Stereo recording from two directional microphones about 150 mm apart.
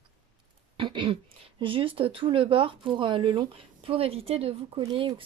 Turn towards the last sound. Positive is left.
turn(degrees=-35)  # may be behind; listen again after turning